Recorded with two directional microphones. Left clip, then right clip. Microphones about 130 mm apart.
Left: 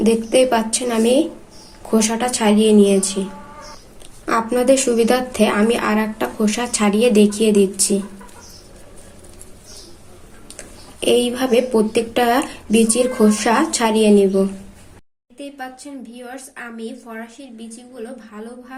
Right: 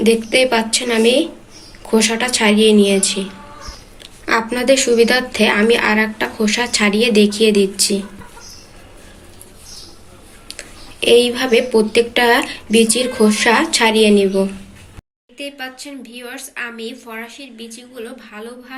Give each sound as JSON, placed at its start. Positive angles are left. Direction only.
{"t": 0.0, "sound": "speech", "side_deg": 55}
{"t": 10.5, "sound": "speech", "side_deg": 55}